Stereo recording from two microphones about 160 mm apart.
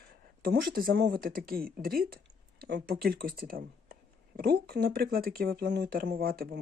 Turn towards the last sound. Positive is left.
turn(degrees=-70)  # may be behind; listen again after turning